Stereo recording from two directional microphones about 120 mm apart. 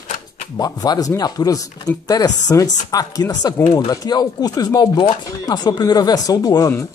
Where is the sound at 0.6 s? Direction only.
30° left (ahead or behind).